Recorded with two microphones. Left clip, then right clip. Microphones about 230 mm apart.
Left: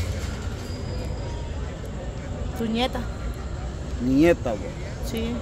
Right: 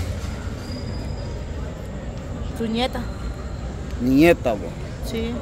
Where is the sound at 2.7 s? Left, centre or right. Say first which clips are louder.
Right 1 dB; centre.